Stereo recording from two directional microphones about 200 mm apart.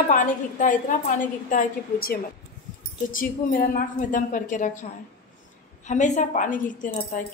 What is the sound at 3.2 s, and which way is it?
A woman's voice, 45° left (ahead or behind).